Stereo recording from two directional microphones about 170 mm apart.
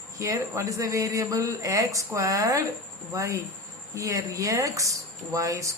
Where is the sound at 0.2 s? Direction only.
20° right (ahead or behind).